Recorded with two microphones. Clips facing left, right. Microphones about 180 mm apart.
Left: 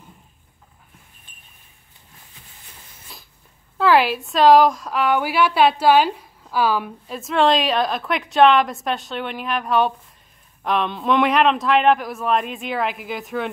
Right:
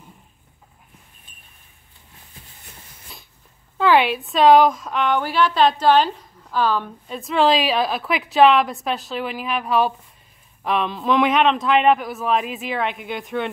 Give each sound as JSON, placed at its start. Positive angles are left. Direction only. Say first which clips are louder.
{"t": 3.7, "sound": "a woman's voice", "louder": "even", "side_deg": 0}